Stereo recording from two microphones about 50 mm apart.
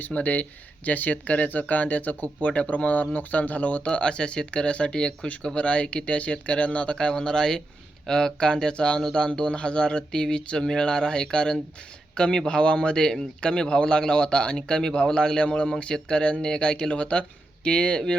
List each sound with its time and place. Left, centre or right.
0.0 s speech: left
3.8 s speech: centre